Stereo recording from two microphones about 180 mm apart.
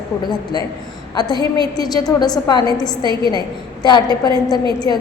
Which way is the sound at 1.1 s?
25° left (ahead or behind).